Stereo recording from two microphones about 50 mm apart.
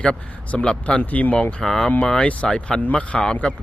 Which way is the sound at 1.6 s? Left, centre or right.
Centre.